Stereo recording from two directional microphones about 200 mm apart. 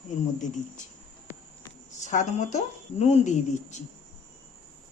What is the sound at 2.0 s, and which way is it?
Speech, 35° left (ahead or behind).